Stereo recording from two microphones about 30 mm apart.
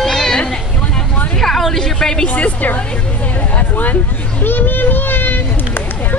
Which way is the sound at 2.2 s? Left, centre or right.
Left.